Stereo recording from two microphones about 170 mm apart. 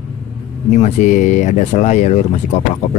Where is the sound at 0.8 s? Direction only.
45° left (ahead or behind).